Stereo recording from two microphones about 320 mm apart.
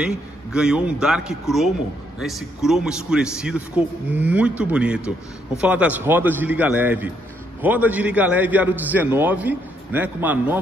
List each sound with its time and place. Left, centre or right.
0.0 s a man's voice: centre